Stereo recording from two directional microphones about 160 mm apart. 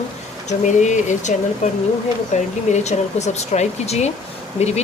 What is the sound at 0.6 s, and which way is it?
Speech, 50° left (ahead or behind).